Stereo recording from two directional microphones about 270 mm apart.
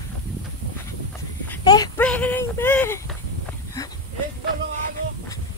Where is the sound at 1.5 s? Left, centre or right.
Centre.